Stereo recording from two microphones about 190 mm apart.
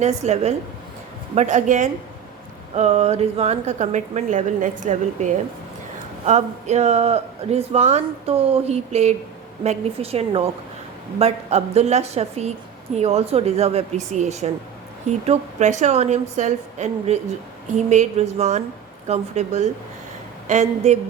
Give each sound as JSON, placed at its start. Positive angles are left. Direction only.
{"t": 0.0, "sound": "speech", "side_deg": -35}